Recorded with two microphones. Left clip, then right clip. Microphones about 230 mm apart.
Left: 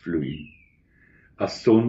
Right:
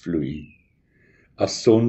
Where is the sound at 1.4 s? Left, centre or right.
Right.